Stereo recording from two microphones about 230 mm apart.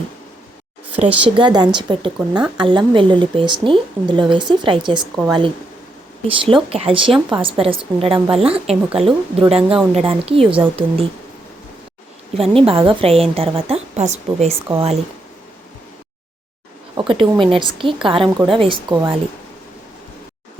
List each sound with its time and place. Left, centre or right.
0.9 s a woman's voice: right
12.3 s a woman's voice: right
17.0 s a woman's voice: right